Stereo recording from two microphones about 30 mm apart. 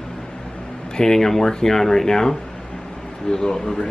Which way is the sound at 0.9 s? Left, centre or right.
Centre.